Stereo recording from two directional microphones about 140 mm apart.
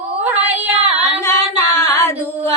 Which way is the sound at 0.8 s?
50° right (ahead or behind).